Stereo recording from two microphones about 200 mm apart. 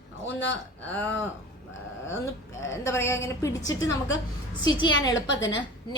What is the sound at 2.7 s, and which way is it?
A woman's voice, 15° left (ahead or behind).